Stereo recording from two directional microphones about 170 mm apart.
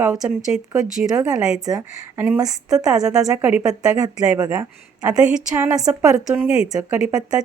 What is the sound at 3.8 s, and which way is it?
Speech, 20° right (ahead or behind).